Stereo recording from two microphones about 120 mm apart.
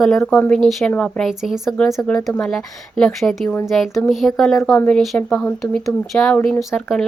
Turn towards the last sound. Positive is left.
turn(degrees=0)  # may be behind; listen again after turning